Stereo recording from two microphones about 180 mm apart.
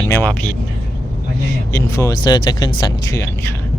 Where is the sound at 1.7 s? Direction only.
15° left (ahead or behind).